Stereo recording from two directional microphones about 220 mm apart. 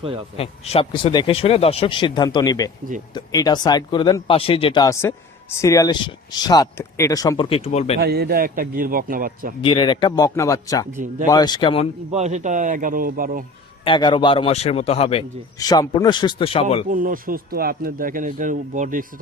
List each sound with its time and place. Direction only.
0.3 s speech: 25° left (ahead or behind)
7.9 s speech: 45° right (ahead or behind)
9.6 s speech: 20° left (ahead or behind)
10.9 s speech: 35° right (ahead or behind)
11.3 s speech: 20° left (ahead or behind)
12.1 s speech: 30° right (ahead or behind)
13.8 s speech: 20° left (ahead or behind)
15.5 s speech: 15° left (ahead or behind)
16.9 s speech: 40° right (ahead or behind)